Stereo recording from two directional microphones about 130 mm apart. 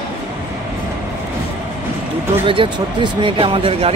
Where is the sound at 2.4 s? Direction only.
40° right (ahead or behind).